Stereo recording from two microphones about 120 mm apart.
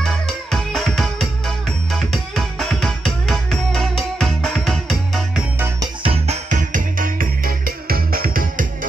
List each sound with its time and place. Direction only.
0.0 s music: centre (ahead or behind)
6.0 s music: 75° right (ahead or behind)